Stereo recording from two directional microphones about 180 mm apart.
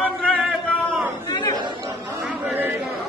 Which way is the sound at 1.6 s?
20° right (ahead or behind).